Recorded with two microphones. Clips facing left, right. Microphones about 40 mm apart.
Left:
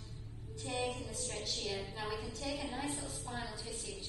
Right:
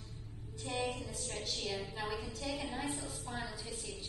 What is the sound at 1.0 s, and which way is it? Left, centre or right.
A woman's voice, centre.